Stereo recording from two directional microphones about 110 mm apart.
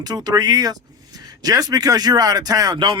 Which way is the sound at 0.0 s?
35° right (ahead or behind).